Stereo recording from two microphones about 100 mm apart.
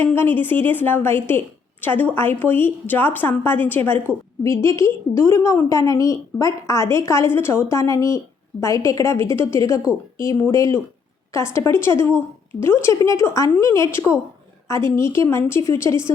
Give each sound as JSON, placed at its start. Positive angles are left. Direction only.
{"t": 0.0, "sound": "a woman's voice", "side_deg": 20}